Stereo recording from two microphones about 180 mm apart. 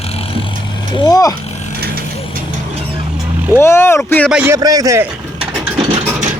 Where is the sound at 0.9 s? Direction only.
20° left (ahead or behind).